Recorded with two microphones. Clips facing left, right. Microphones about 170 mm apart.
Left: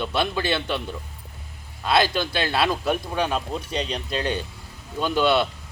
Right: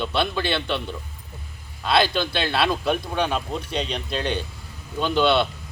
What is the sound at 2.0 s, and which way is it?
Speech, 45° left (ahead or behind).